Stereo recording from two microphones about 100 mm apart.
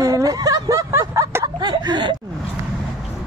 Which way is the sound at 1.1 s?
25° right (ahead or behind).